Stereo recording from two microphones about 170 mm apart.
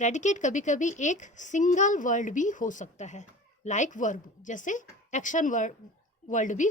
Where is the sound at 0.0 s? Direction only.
45° left (ahead or behind).